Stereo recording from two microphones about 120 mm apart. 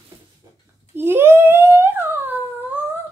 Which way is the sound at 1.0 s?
20° right (ahead or behind).